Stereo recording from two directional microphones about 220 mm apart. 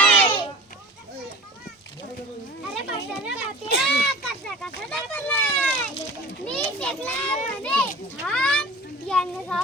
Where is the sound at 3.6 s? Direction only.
50° left (ahead or behind).